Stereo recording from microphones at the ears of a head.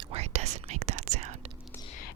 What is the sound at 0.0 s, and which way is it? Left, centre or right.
Whispering, right.